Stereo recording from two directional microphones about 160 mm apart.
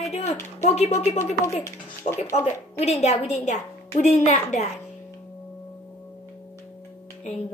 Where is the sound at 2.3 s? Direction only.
40° left (ahead or behind).